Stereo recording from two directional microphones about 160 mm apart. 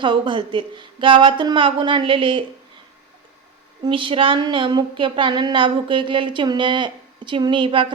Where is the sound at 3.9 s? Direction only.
35° right (ahead or behind).